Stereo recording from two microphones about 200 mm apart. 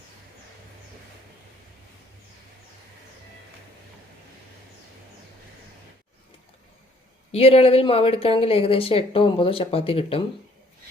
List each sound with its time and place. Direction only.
7.3 s speech: 30° left (ahead or behind)